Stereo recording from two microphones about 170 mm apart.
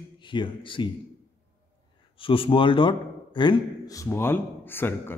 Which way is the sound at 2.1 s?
30° left (ahead or behind).